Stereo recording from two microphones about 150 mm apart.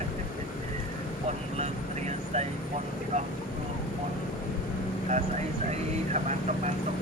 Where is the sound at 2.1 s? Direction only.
45° right (ahead or behind).